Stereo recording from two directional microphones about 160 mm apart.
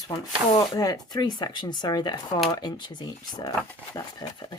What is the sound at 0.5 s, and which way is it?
Speech, 25° left (ahead or behind).